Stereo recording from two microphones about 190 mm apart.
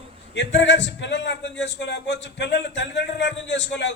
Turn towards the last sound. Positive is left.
turn(degrees=70)  # may be behind; listen again after turning